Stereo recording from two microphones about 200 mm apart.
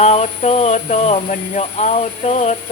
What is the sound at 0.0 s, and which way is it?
Speech, 35° left (ahead or behind).